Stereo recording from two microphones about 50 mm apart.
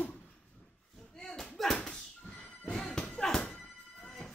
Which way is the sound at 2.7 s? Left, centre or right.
Centre.